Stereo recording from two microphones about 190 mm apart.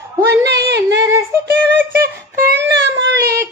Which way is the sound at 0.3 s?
60° right (ahead or behind).